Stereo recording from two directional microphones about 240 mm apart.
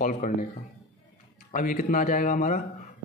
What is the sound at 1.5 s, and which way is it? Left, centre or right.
Speech, left.